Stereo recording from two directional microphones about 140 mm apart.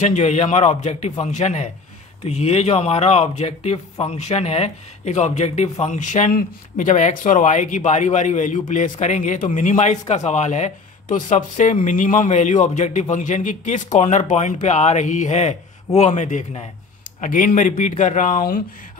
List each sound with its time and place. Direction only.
0.0 s a man's voice: 55° left (ahead or behind)
17.2 s a man's voice: 80° left